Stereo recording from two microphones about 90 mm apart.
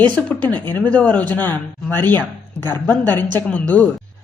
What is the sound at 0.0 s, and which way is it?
Speech, 15° left (ahead or behind).